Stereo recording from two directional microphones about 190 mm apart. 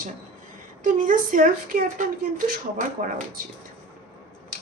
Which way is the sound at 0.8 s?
45° right (ahead or behind).